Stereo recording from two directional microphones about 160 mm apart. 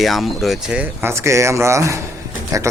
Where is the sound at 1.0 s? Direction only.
15° right (ahead or behind).